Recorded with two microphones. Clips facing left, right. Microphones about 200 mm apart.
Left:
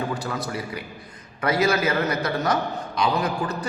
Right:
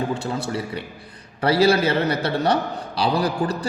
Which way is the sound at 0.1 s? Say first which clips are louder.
Right 3 dB; 25° right (ahead or behind).